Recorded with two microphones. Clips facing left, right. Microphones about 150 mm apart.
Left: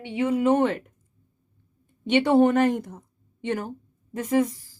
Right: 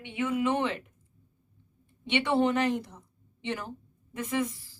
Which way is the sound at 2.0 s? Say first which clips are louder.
Left 7 dB; 40° left (ahead or behind).